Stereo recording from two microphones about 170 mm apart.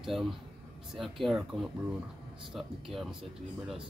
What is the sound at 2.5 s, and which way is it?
Speech, centre (ahead or behind).